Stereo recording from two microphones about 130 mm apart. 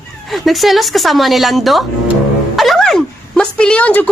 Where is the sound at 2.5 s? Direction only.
Centre (ahead or behind).